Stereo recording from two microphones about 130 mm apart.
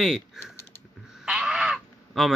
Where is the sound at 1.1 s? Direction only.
5° right (ahead or behind).